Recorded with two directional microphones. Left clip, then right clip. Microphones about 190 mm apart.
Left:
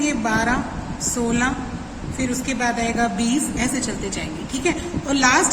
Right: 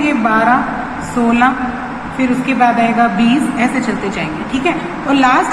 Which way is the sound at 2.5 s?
60° left (ahead or behind).